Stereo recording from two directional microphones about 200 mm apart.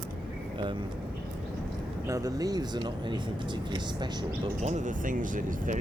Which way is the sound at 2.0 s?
15° right (ahead or behind).